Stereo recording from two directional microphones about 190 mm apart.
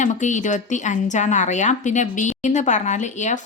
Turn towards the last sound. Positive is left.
turn(degrees=40)  # may be behind; listen again after turning